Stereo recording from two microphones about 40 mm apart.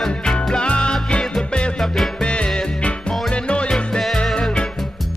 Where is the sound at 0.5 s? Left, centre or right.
Left.